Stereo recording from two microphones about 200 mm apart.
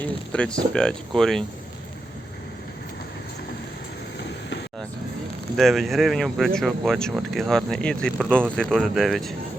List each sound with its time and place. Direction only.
0.0 s speech: 5° left (ahead or behind)
5.5 s speech: centre (ahead or behind)